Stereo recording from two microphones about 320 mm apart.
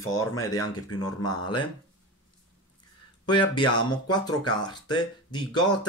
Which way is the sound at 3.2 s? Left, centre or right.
Centre.